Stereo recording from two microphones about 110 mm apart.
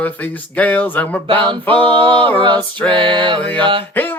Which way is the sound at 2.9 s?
45° right (ahead or behind).